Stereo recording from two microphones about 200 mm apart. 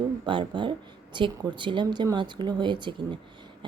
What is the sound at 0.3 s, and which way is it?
Speech, 25° right (ahead or behind).